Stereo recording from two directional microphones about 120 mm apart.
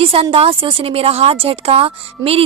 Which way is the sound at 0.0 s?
50° right (ahead or behind).